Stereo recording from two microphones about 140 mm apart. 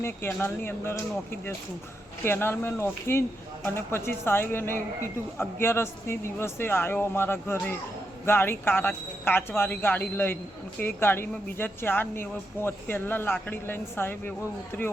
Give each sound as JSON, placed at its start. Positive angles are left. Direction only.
{"t": 0.0, "sound": "speech", "side_deg": 15}